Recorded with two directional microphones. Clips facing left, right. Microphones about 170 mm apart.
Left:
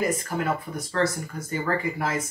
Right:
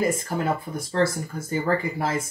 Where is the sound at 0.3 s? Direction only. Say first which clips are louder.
Right 1 dB; 30° right (ahead or behind).